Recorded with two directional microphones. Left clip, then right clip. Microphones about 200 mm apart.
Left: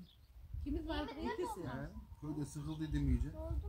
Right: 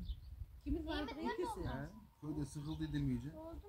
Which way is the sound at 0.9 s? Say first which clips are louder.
Left 1 dB; 35° right (ahead or behind).